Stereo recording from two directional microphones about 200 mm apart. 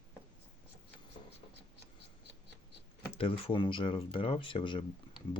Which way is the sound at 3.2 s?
25° left (ahead or behind).